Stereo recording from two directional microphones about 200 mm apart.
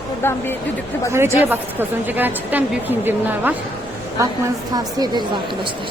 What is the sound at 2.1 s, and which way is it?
A woman's voice, 10° right (ahead or behind).